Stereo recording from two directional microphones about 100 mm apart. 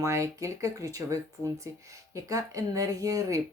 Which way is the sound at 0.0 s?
30° right (ahead or behind).